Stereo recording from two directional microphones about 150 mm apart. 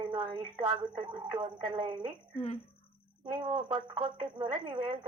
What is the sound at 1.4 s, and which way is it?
Speech, 45° right (ahead or behind).